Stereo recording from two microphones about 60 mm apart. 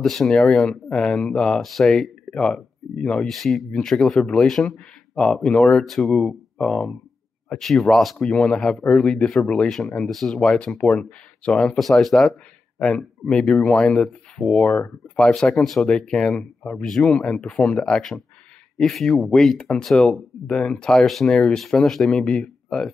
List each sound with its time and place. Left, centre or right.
0.0 s speech: centre
3.3 s speech: centre
5.9 s speech: centre
8.3 s speech: centre
10.0 s speech: centre
10.4 s speech: centre
16.0 s speech: centre
18.8 s speech: centre
22.1 s speech: centre